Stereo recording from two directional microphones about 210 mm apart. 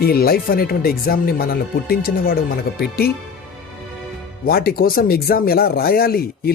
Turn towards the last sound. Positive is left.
turn(degrees=45)  # may be behind; listen again after turning